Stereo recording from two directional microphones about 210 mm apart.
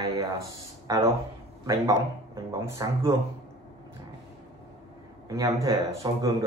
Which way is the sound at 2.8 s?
15° right (ahead or behind).